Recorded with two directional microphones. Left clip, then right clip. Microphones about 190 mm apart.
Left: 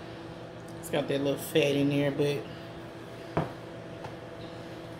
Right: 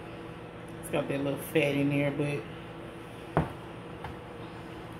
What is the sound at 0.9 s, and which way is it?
Speech, 20° left (ahead or behind).